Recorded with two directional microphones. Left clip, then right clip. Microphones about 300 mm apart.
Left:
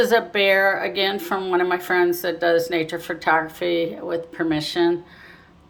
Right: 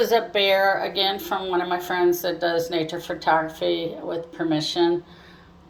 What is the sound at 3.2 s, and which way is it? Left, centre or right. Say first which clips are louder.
Speech: left 1 dB; left.